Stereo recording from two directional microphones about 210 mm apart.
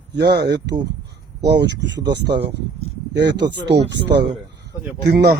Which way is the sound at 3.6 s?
55° right (ahead or behind).